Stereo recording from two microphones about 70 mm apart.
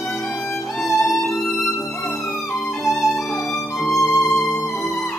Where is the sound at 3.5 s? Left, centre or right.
Centre.